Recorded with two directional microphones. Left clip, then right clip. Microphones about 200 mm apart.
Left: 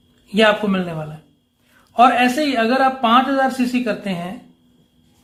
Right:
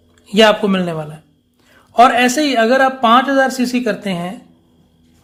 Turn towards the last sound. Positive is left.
turn(degrees=-40)  # may be behind; listen again after turning